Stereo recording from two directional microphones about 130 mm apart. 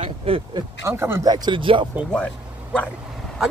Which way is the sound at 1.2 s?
30° right (ahead or behind).